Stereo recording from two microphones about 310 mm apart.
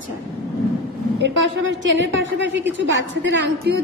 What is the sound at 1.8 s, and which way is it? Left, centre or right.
A woman's voice, right.